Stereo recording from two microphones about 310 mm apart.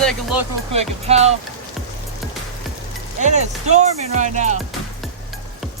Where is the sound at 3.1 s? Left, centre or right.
Right.